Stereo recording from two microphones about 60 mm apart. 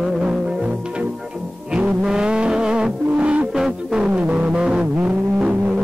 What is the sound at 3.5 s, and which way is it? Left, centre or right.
Music, centre.